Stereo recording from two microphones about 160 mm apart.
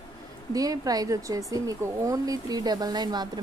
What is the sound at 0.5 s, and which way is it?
Speech, 20° right (ahead or behind).